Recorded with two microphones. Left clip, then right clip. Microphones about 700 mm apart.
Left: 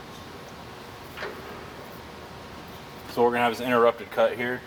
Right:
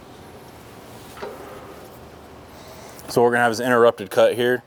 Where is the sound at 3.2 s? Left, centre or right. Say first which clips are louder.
Right 4 dB; right.